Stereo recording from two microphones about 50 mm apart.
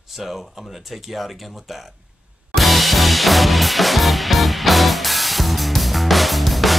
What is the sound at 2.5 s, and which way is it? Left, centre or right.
Music, centre.